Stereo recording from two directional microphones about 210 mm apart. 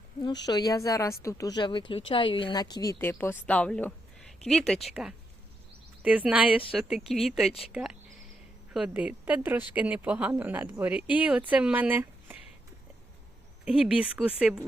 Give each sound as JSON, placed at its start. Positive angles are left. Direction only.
{"t": 0.2, "sound": "a woman's voice", "side_deg": 20}
{"t": 13.7, "sound": "speech", "side_deg": -5}